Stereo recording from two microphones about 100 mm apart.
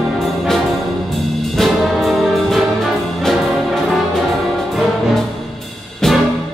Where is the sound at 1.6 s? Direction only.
Centre (ahead or behind).